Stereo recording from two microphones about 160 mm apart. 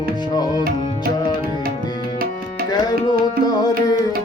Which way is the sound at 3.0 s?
25° left (ahead or behind).